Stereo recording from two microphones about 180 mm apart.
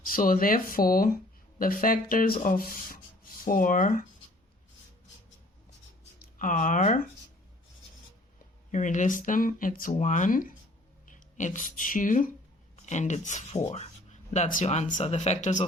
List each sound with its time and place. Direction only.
0.0 s speech: 50° left (ahead or behind)
6.4 s speech: 45° left (ahead or behind)
8.7 s speech: 45° left (ahead or behind)